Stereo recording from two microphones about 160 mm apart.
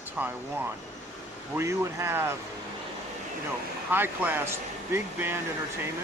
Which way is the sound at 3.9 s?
15° right (ahead or behind).